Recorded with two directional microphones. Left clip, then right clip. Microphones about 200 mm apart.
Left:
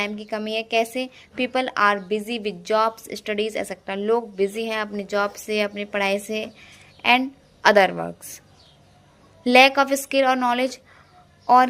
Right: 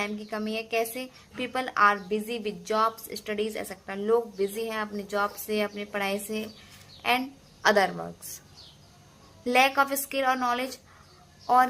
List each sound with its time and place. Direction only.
0.0 s a woman's voice: 35° left (ahead or behind)
9.4 s a woman's voice: 35° left (ahead or behind)